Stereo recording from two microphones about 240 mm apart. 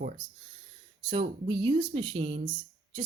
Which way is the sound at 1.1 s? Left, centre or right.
Right.